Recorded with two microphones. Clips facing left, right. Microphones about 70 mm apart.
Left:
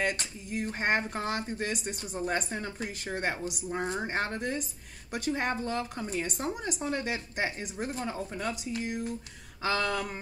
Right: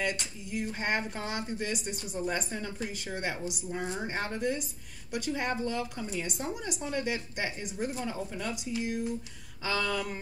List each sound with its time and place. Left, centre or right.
0.0 s speech: left